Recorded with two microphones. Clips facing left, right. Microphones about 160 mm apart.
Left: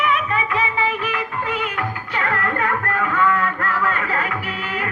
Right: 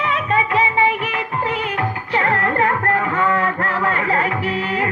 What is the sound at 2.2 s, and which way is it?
Music, 30° right (ahead or behind).